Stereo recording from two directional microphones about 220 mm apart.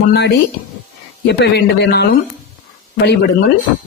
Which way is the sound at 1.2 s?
50° left (ahead or behind).